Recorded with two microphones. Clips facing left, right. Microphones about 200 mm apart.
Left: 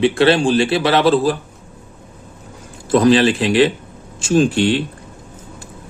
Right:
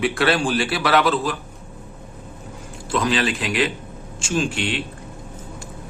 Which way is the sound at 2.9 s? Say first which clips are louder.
Left 9 dB; 35° left (ahead or behind).